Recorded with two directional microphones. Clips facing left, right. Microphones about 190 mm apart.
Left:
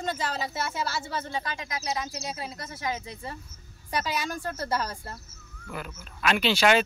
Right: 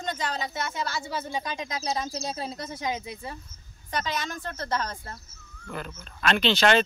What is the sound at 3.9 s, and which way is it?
Speech, 10° left (ahead or behind).